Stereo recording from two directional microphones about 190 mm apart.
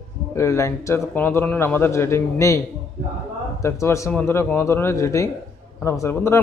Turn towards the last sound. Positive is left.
turn(degrees=15)  # may be behind; listen again after turning